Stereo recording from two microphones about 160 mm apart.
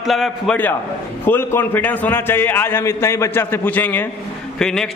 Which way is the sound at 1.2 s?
15° left (ahead or behind).